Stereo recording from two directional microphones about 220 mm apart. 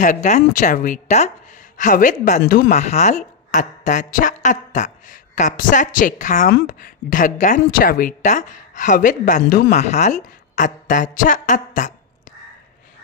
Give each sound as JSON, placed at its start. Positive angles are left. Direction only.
{"t": 0.0, "sound": "a woman's voice", "side_deg": 35}